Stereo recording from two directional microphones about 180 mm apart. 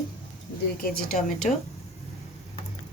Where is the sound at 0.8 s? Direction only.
55° left (ahead or behind).